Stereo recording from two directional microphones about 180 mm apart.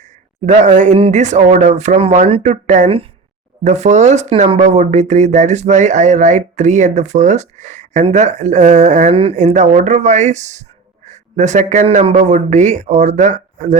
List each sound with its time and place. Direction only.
0.8 s speech: 35° right (ahead or behind)